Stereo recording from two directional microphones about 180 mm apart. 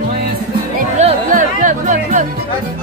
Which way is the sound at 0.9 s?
40° right (ahead or behind).